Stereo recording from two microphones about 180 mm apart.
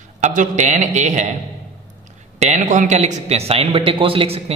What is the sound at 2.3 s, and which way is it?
A man's voice, 40° right (ahead or behind).